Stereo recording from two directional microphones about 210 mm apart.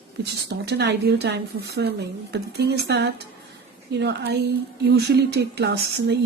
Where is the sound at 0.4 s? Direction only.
55° right (ahead or behind).